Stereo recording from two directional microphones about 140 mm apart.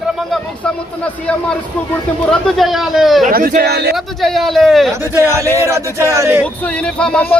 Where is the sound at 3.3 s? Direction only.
90° right.